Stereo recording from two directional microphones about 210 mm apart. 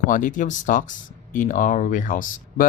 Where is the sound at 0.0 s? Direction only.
40° left (ahead or behind).